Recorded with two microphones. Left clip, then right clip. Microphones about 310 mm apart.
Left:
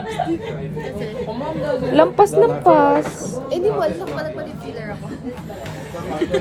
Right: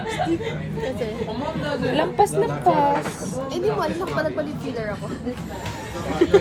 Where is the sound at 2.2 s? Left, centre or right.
Left.